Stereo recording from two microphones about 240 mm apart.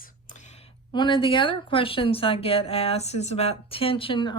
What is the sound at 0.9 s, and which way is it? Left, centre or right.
A woman's voice, centre.